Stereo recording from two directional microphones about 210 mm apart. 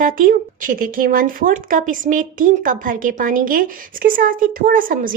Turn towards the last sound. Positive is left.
turn(degrees=-40)  # may be behind; listen again after turning